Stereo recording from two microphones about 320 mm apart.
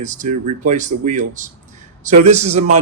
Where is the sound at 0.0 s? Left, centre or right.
Right.